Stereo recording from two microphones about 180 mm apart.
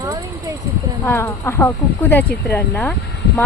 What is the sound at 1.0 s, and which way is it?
Speech, 15° left (ahead or behind).